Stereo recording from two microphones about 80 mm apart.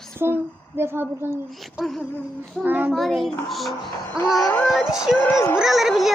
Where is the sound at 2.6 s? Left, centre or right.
Right.